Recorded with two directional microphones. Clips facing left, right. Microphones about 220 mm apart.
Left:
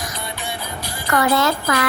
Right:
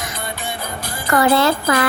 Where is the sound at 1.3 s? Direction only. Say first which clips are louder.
Right 3 dB; 30° right (ahead or behind).